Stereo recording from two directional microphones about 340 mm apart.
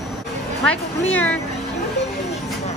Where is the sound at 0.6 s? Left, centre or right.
Centre.